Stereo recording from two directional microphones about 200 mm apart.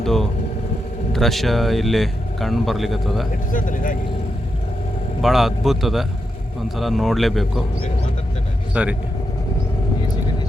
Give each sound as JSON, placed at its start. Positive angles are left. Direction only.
{"t": 0.0, "sound": "speech", "side_deg": 0}
{"t": 3.5, "sound": "speech", "side_deg": 40}
{"t": 5.2, "sound": "speech", "side_deg": 0}
{"t": 8.7, "sound": "speech", "side_deg": -5}